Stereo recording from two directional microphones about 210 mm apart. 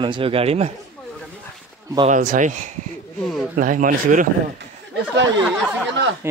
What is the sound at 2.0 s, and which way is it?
Speech, 35° right (ahead or behind).